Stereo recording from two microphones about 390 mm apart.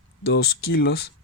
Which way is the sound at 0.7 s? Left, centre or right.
Left.